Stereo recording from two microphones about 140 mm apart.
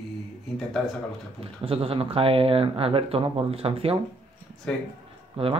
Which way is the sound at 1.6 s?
45° right (ahead or behind).